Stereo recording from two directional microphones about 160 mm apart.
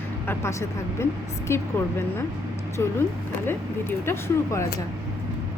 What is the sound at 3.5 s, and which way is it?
Speech, 15° left (ahead or behind).